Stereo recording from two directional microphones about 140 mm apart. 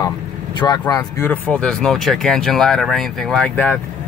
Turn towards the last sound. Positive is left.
turn(degrees=10)  # may be behind; listen again after turning